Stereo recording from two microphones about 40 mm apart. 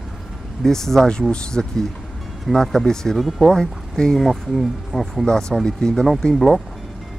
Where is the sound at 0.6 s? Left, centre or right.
Centre.